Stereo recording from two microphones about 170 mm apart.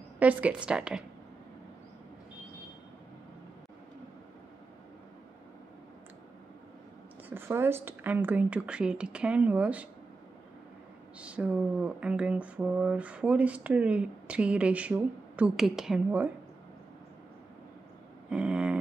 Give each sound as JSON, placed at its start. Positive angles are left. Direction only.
{"t": 0.2, "sound": "speech", "side_deg": -10}
{"t": 7.2, "sound": "speech", "side_deg": -15}
{"t": 11.1, "sound": "speech", "side_deg": -5}
{"t": 18.3, "sound": "a sound", "side_deg": -5}